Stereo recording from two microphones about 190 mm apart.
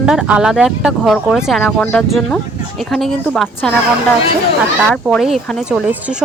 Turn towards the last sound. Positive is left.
turn(degrees=-5)  # may be behind; listen again after turning